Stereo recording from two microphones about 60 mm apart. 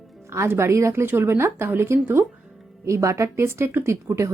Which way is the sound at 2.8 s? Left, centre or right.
Right.